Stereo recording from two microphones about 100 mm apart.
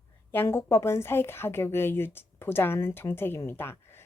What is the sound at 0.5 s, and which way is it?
A woman's voice, 25° left (ahead or behind).